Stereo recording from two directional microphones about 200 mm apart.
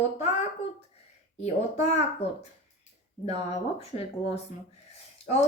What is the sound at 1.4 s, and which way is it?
A woman's voice, 35° left (ahead or behind).